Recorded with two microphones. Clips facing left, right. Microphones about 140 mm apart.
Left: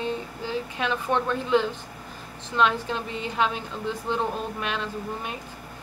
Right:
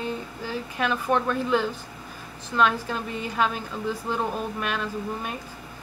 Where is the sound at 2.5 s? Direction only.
25° left (ahead or behind).